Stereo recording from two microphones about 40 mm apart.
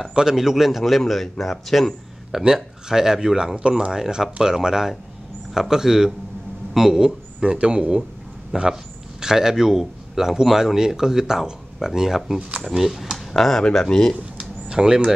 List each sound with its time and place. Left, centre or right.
0.1 s a man's voice: centre
2.3 s a man's voice: centre
3.9 s a man's voice: centre
6.7 s a sound: centre
7.4 s speech: right
8.5 s a man's voice: centre
12.4 s speech: right
12.7 s a man's voice: centre
13.4 s speech: centre
14.4 s a sound: centre